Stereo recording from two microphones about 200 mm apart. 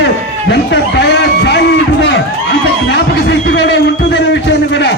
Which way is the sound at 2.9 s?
60° left (ahead or behind).